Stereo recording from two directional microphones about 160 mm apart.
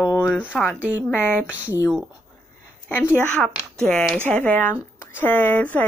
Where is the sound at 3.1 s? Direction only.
5° left (ahead or behind).